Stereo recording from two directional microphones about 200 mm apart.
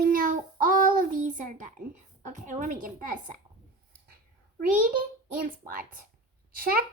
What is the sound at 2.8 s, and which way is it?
Speech, 40° right (ahead or behind).